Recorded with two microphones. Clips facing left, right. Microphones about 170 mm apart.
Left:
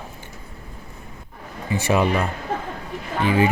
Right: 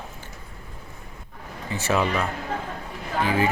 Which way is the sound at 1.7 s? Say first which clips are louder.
Left 4 dB; 15° left (ahead or behind).